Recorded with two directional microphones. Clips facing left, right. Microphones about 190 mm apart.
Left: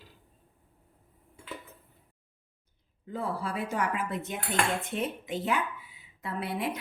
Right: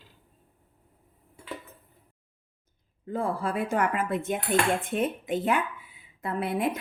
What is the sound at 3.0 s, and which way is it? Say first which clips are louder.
Speech: right 5 dB; 50° right (ahead or behind).